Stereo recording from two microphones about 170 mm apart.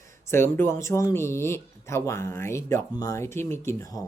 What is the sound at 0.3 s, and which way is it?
Speech, 15° left (ahead or behind).